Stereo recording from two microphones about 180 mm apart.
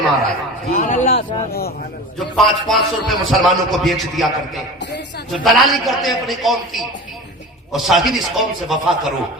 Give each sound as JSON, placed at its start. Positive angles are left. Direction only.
{"t": 0.8, "sound": "a man's voice", "side_deg": 40}
{"t": 1.1, "sound": "speech", "side_deg": 60}
{"t": 2.1, "sound": "a man's voice", "side_deg": 0}